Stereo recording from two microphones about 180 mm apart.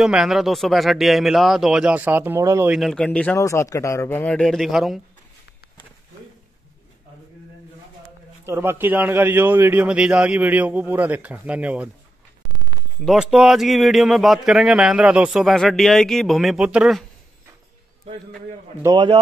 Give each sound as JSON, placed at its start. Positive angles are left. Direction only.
{"t": 0.0, "sound": "speech", "side_deg": -5}
{"t": 2.7, "sound": "speech", "side_deg": 0}
{"t": 3.3, "sound": "speech", "side_deg": 15}
{"t": 8.5, "sound": "a man's voice", "side_deg": -15}
{"t": 13.0, "sound": "speech", "side_deg": -5}
{"t": 18.8, "sound": "a man's voice", "side_deg": -25}